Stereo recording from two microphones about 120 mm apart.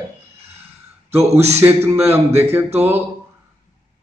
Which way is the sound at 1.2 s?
60° right (ahead or behind).